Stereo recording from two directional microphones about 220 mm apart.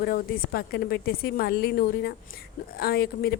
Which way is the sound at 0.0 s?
40° left (ahead or behind).